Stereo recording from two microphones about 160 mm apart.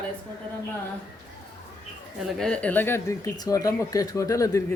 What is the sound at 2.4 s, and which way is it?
Speech, 5° left (ahead or behind).